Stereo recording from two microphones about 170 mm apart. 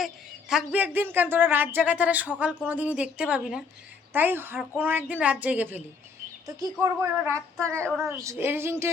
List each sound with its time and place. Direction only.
0.0 s a woman's voice: 5° right (ahead or behind)
7.9 s a woman's voice: centre (ahead or behind)
8.1 s a woman's voice: 15° right (ahead or behind)